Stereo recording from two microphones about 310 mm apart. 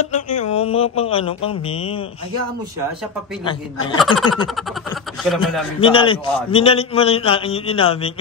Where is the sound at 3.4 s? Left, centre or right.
Centre.